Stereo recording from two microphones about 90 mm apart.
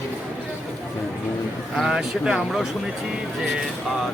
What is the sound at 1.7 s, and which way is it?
Speech, 5° right (ahead or behind).